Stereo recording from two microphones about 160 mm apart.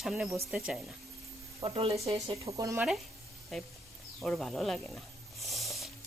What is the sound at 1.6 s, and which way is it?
Speech, 35° right (ahead or behind).